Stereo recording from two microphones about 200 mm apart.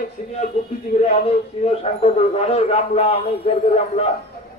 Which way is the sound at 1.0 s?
30° left (ahead or behind).